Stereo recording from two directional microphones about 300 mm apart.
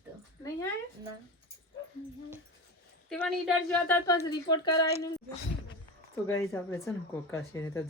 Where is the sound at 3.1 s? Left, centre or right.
Centre.